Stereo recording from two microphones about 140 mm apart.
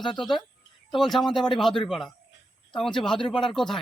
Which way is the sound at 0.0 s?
Centre (ahead or behind).